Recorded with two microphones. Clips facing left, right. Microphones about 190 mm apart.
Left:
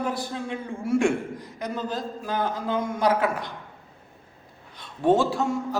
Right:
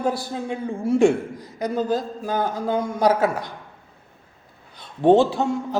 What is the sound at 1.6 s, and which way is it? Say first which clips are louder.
A man's voice: right 7 dB; 40° right (ahead or behind).